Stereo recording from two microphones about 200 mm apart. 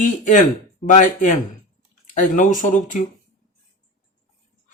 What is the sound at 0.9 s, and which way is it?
Speech, 40° left (ahead or behind).